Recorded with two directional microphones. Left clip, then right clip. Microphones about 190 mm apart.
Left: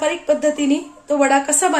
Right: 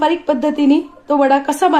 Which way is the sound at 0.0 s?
40° right (ahead or behind).